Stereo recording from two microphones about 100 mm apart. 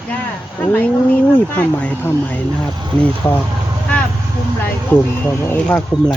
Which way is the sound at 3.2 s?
20° left (ahead or behind).